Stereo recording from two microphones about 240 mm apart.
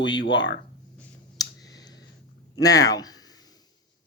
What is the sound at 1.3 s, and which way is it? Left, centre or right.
Clicking, centre.